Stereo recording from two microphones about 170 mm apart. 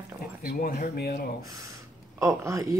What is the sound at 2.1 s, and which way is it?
Speech, 15° right (ahead or behind).